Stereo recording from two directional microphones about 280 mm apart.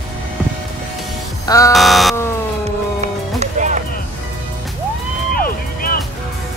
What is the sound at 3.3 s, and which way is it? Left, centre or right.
Music, right.